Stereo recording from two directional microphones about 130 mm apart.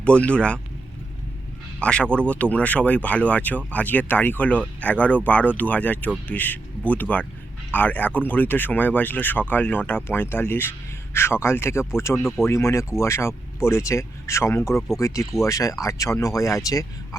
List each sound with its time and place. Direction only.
0.0 s speech: 10° left (ahead or behind)
1.8 s speech: 10° left (ahead or behind); by 17.2 s 25° left (ahead or behind)